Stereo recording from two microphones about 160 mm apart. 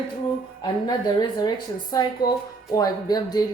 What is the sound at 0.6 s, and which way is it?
A woman's voice, 25° left (ahead or behind).